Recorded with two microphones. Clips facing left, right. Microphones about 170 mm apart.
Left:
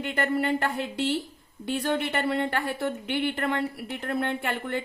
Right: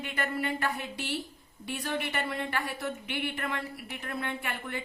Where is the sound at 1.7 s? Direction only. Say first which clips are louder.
Left 6 dB; 65° left (ahead or behind).